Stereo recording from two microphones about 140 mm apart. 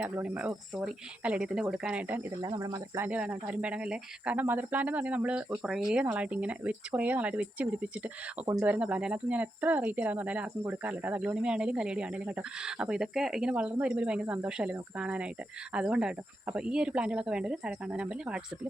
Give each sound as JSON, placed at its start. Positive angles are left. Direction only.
{"t": 0.0, "sound": "speech", "side_deg": -10}
{"t": 2.4, "sound": "speech", "side_deg": -25}
{"t": 3.1, "sound": "speech", "side_deg": -10}